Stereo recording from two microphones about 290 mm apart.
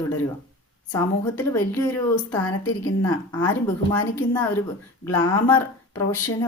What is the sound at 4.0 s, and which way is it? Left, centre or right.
A woman's voice, centre.